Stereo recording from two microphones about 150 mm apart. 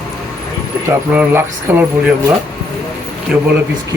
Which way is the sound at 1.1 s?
10° right (ahead or behind).